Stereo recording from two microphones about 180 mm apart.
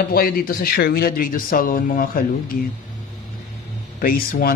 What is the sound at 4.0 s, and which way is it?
Speech, 55° left (ahead or behind).